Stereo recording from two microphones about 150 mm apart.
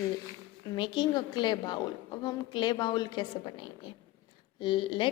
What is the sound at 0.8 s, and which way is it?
A woman's voice, 30° left (ahead or behind).